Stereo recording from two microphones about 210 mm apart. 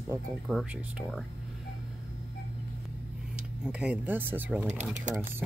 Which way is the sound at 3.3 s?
5° right (ahead or behind).